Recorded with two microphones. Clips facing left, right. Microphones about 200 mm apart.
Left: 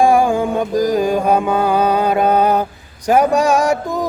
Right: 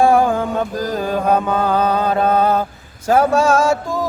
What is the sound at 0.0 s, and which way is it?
Music, 15° left (ahead or behind).